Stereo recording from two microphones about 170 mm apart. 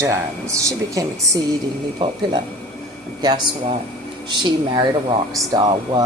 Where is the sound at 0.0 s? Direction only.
15° right (ahead or behind).